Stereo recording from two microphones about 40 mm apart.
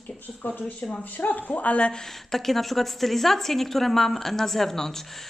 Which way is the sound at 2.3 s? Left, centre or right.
Centre.